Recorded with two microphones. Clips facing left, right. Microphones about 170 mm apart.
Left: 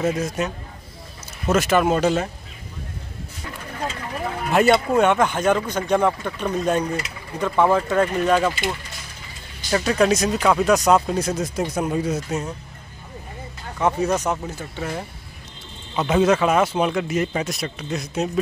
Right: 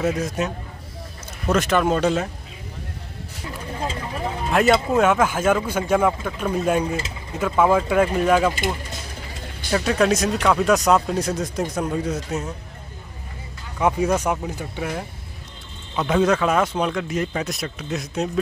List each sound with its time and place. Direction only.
0.0 s speech: centre (ahead or behind)
3.7 s a sound: 25° right (ahead or behind)
4.5 s speech: centre (ahead or behind)
9.7 s speech: centre (ahead or behind)
13.7 s speech: 10° right (ahead or behind)
16.0 s speech: 5° left (ahead or behind)